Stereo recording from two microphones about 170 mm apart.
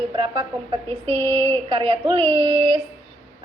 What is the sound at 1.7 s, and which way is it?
A woman's voice, 30° right (ahead or behind).